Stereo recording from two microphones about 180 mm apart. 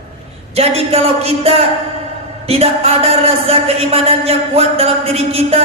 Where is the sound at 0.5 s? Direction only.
35° right (ahead or behind).